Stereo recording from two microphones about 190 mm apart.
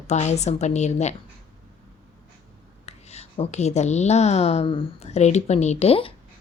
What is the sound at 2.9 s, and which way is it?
A woman's voice, 35° left (ahead or behind).